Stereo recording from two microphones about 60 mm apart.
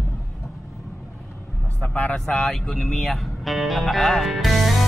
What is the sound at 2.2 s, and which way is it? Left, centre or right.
Music, centre.